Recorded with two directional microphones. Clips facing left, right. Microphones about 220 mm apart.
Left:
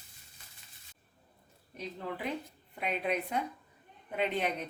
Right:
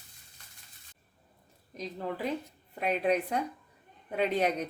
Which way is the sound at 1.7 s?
40° right (ahead or behind).